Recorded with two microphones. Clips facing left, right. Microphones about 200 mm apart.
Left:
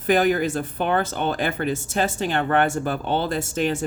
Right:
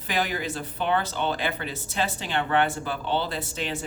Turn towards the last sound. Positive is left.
turn(degrees=45)  # may be behind; listen again after turning